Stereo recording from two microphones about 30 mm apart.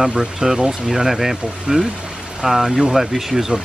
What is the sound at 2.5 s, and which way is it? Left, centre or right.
Speech, centre.